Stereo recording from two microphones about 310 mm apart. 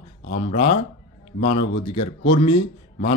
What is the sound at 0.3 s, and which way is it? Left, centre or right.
Speech, left.